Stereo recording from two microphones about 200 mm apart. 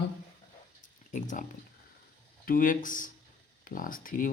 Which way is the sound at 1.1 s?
40° left (ahead or behind).